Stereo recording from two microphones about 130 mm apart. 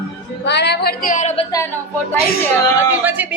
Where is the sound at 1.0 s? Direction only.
75° left (ahead or behind).